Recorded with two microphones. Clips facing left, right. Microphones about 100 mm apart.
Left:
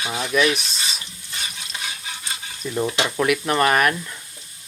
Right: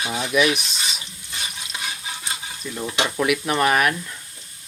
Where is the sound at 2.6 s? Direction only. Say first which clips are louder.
Left 7 dB; 20° left (ahead or behind).